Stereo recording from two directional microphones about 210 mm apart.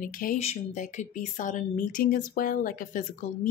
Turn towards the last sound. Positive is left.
turn(degrees=40)  # may be behind; listen again after turning